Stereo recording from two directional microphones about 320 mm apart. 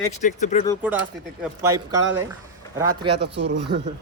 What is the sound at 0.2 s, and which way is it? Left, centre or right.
Speech, left.